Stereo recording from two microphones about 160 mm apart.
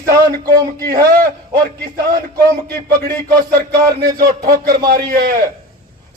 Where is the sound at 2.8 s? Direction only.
70° right (ahead or behind).